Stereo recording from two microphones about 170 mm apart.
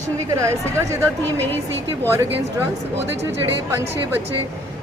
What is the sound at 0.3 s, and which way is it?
Speech, 15° right (ahead or behind).